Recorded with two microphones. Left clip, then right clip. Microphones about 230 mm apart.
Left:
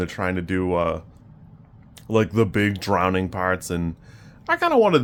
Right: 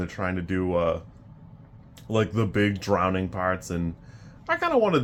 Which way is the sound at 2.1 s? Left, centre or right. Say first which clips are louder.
Left 5 dB; left.